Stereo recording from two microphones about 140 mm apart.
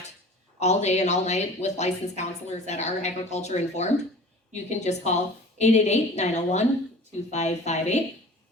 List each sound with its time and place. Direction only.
0.6 s a woman's voice: 55° left (ahead or behind)